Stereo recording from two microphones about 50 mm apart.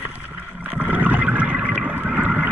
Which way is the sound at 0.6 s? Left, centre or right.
Right.